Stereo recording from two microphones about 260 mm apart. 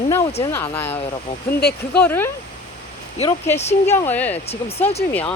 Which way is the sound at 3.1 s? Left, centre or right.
Left.